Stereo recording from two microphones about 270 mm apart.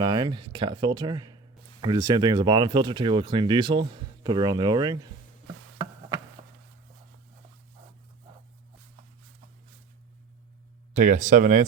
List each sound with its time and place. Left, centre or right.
0.0 s speech: centre
10.9 s speech: right